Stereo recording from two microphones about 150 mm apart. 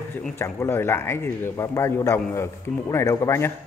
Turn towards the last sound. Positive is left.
turn(degrees=20)  # may be behind; listen again after turning